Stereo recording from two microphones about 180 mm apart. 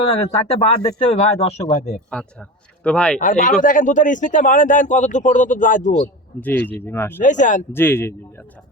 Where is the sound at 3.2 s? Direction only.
45° left (ahead or behind).